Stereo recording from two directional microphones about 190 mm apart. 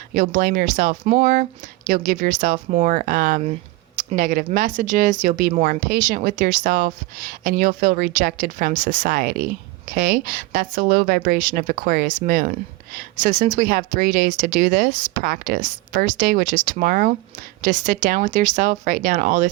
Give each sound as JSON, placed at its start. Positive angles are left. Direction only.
{"t": 0.1, "sound": "speech", "side_deg": -45}